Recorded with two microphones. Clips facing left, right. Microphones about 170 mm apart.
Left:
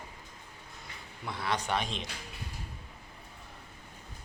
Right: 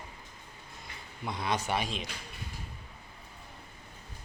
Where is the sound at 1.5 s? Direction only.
5° right (ahead or behind).